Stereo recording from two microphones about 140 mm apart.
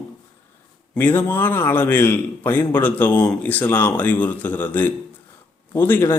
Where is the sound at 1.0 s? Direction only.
10° left (ahead or behind).